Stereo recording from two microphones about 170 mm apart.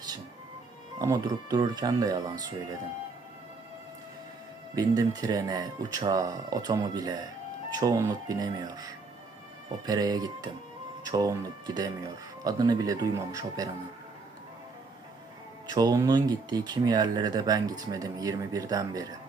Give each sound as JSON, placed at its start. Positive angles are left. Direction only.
{"t": 0.9, "sound": "speech", "side_deg": -20}
{"t": 4.7, "sound": "speech", "side_deg": -20}
{"t": 15.7, "sound": "speech", "side_deg": -20}